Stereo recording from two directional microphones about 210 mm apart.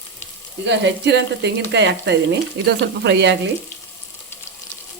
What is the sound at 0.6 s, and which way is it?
Speech, 55° right (ahead or behind).